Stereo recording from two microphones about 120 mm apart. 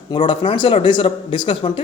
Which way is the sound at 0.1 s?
45° left (ahead or behind).